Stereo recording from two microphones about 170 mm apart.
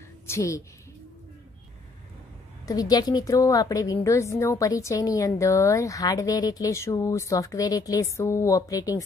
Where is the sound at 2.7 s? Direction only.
20° left (ahead or behind).